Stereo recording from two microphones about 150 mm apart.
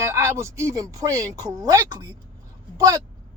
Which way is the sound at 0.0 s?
20° right (ahead or behind).